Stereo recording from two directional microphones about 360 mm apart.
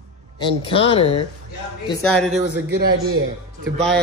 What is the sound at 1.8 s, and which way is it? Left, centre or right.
Speech, centre.